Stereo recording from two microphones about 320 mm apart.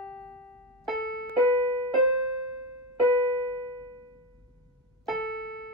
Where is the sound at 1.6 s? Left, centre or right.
Centre.